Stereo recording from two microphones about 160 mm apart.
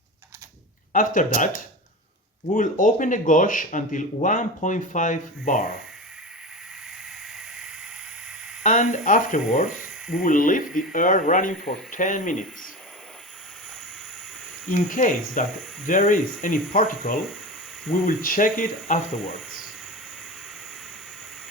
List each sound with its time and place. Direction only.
0.9 s speech: 55° left (ahead or behind)
2.6 s speech: 55° left (ahead or behind)
7.3 s a sound: 5° right (ahead or behind)
8.6 s speech: 50° left (ahead or behind)
14.7 s speech: 55° left (ahead or behind)